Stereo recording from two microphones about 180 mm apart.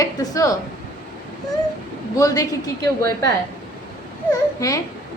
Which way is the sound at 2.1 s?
20° left (ahead or behind).